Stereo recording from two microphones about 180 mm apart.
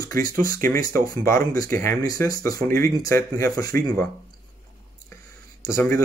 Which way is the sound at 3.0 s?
15° left (ahead or behind).